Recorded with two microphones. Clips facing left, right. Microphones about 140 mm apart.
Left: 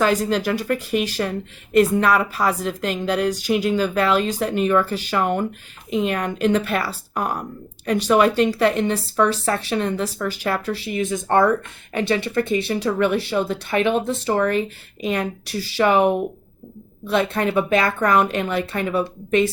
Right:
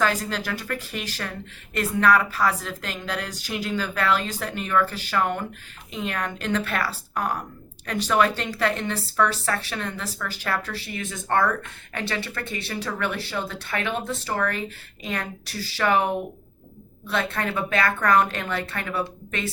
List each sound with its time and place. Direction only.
0.0 s a woman's voice: 20° left (ahead or behind)